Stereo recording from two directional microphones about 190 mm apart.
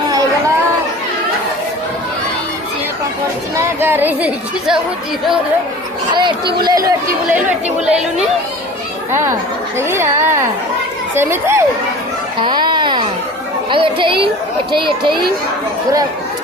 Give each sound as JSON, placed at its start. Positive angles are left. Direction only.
{"t": 3.6, "sound": "speech", "side_deg": -10}
{"t": 6.4, "sound": "speech", "side_deg": -60}
{"t": 6.7, "sound": "speech", "side_deg": -20}
{"t": 7.9, "sound": "speech", "side_deg": -5}
{"t": 9.7, "sound": "speech", "side_deg": -15}
{"t": 12.4, "sound": "baby cry", "side_deg": -25}
{"t": 13.7, "sound": "speech", "side_deg": -25}